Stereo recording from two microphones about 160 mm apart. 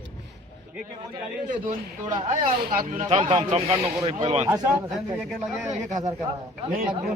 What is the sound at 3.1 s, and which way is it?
A man's voice, 35° right (ahead or behind).